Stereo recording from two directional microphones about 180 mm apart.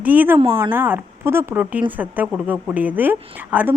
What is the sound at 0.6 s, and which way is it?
A woman's voice, 10° right (ahead or behind).